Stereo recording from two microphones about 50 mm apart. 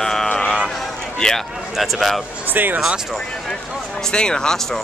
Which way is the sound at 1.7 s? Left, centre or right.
Centre.